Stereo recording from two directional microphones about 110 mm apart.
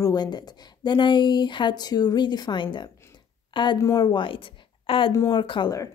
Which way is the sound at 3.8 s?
35° left (ahead or behind).